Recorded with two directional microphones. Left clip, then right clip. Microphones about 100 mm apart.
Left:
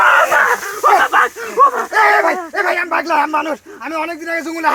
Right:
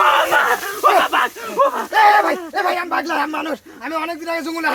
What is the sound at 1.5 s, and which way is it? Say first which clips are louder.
Speech: left 4 dB; 35° right (ahead or behind).